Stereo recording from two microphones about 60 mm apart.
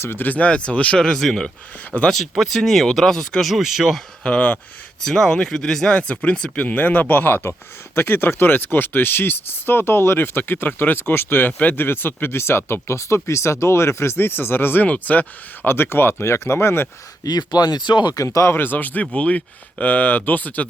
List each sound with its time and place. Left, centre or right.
0.0 s speech: left
0.3 s speech: left
1.0 s speech: centre
3.5 s speech: centre
4.2 s speech: centre
5.0 s speech: centre
6.7 s speech: left
14.8 s speech: left
15.7 s speech: left
16.2 s speech: left
17.2 s speech: left
18.2 s speech: left
18.4 s speech: left